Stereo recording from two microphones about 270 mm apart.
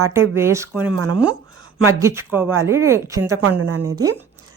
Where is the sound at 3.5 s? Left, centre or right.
Right.